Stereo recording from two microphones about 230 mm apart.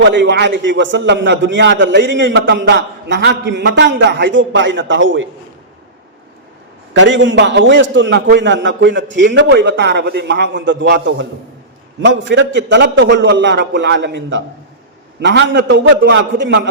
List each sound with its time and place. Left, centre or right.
0.0 s a man's voice: right
6.9 s a man's voice: right